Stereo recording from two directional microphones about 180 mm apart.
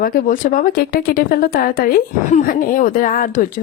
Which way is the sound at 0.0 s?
50° left (ahead or behind).